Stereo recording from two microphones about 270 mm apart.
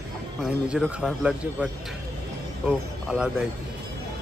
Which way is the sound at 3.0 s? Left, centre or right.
Centre.